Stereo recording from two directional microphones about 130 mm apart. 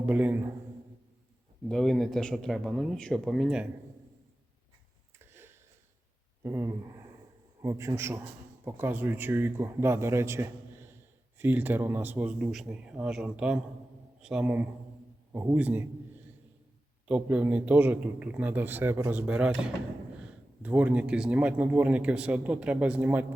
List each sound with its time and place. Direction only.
0.0 s speech: 10° right (ahead or behind)
1.6 s speech: centre (ahead or behind)
5.2 s a sound: 20° right (ahead or behind)
6.4 s a man's voice: 20° right (ahead or behind)
17.1 s speech: 10° right (ahead or behind)